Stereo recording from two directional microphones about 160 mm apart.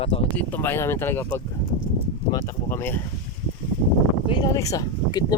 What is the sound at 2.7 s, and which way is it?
Speech, 15° left (ahead or behind).